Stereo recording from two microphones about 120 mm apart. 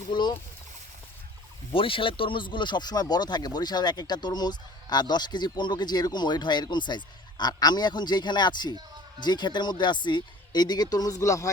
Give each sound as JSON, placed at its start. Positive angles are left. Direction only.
{"t": 0.1, "sound": "speech", "side_deg": 40}
{"t": 1.7, "sound": "speech", "side_deg": 45}